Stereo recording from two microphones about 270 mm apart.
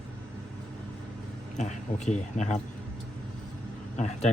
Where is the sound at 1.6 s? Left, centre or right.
Left.